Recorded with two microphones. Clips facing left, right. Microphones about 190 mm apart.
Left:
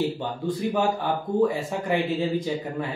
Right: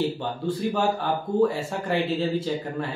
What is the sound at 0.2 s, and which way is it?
Speech, 15° left (ahead or behind).